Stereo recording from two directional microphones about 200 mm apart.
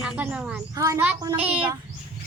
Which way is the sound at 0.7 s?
15° right (ahead or behind).